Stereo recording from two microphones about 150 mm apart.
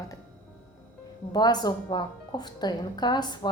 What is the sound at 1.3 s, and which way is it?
Speech, 30° left (ahead or behind).